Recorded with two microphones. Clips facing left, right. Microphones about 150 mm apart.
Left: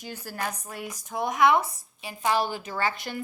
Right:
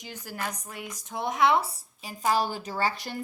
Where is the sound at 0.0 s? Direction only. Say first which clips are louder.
Left 2 dB; 20° right (ahead or behind).